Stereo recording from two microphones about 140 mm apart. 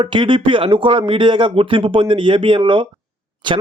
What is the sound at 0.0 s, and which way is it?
A man's voice, 35° right (ahead or behind).